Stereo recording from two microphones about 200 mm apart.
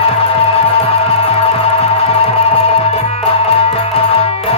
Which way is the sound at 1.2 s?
30° left (ahead or behind).